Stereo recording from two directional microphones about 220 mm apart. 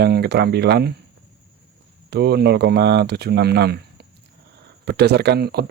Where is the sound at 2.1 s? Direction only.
50° right (ahead or behind).